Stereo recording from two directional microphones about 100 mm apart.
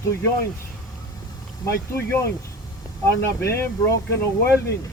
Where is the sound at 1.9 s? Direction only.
20° left (ahead or behind).